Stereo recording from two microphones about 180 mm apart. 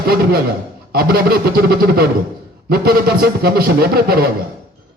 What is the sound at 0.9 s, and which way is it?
A man's voice, 60° right (ahead or behind).